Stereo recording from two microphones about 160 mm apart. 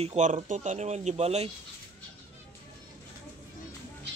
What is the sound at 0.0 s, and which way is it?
Speech, 45° right (ahead or behind).